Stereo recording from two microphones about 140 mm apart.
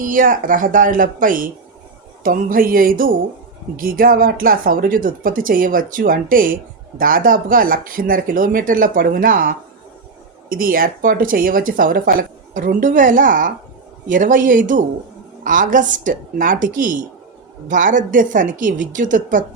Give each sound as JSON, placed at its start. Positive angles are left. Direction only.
{"t": 0.0, "sound": "a woman's voice", "side_deg": -75}
{"t": 2.2, "sound": "music", "side_deg": -85}
{"t": 3.8, "sound": "speech", "side_deg": -90}
{"t": 12.5, "sound": "a woman's voice", "side_deg": -70}